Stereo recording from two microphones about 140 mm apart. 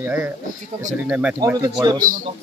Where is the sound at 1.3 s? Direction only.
25° right (ahead or behind).